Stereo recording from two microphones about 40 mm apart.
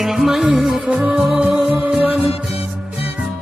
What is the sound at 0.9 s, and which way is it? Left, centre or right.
Music, right.